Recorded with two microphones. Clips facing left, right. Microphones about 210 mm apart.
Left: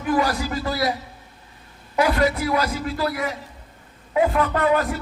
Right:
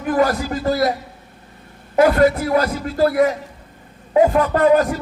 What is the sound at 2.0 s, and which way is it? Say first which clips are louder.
A man's voice: right 6 dB; 50° right (ahead or behind).